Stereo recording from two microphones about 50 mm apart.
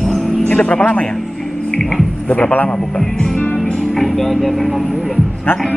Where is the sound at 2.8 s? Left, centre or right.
Centre.